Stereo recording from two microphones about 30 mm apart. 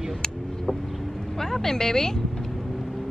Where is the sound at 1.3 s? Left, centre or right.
Centre.